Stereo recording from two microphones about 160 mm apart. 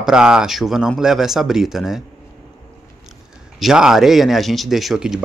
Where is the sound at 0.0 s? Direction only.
5° right (ahead or behind).